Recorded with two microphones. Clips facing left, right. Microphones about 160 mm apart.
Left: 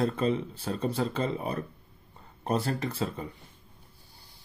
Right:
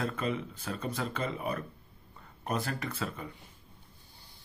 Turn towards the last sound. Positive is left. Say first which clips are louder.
# left 5 dB
turn(degrees=30)  # may be behind; listen again after turning